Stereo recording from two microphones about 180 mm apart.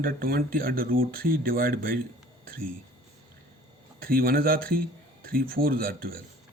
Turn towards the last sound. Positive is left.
turn(degrees=-55)  # may be behind; listen again after turning